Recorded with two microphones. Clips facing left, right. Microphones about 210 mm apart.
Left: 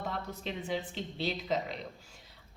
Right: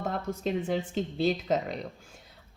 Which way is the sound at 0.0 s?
45° right (ahead or behind).